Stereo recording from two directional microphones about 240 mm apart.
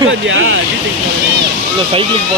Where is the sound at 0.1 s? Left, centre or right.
Right.